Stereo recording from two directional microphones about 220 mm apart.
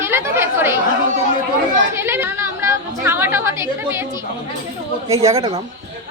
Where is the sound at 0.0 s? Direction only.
10° right (ahead or behind).